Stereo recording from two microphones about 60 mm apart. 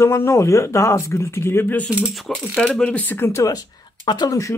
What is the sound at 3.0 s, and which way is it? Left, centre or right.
Speech, left.